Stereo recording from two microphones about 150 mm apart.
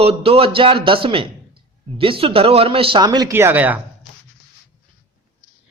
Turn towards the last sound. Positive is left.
turn(degrees=-10)  # may be behind; listen again after turning